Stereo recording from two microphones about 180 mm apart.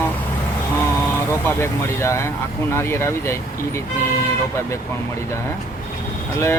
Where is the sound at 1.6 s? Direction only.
15° left (ahead or behind).